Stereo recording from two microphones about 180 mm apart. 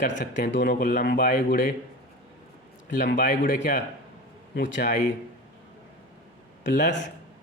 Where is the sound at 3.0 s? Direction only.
45° left (ahead or behind).